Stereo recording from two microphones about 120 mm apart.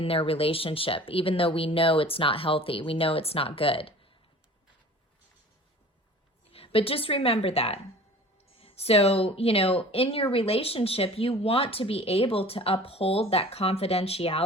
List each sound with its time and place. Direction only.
0.0 s speech: 50° left (ahead or behind)
6.5 s a woman's voice: 50° left (ahead or behind)